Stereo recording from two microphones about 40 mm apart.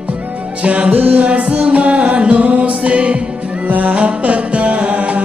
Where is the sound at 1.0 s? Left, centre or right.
Right.